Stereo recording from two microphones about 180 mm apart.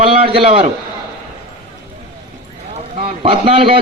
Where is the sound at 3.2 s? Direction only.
30° right (ahead or behind).